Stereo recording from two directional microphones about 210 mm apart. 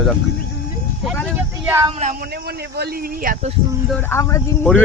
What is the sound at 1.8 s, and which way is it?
Speech, 30° right (ahead or behind).